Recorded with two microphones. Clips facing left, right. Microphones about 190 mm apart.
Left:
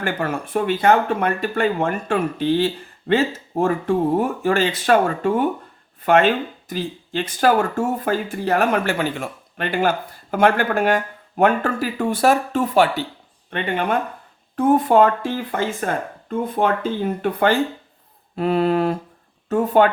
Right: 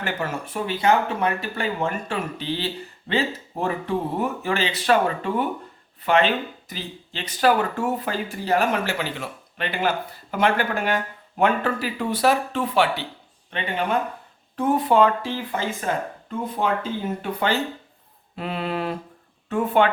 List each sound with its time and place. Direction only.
0.0 s speech: 55° left (ahead or behind)
14.5 s speech: 50° left (ahead or behind)
17.2 s speech: 50° left (ahead or behind)